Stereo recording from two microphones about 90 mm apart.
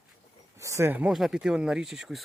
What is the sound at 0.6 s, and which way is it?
Speech, 35° right (ahead or behind).